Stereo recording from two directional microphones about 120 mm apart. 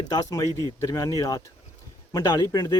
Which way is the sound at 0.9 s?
30° left (ahead or behind).